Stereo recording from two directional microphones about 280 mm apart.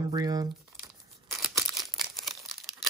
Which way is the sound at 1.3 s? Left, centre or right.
Centre.